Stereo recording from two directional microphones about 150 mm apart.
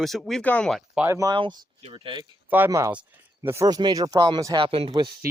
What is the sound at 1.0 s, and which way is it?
Speech, 20° right (ahead or behind).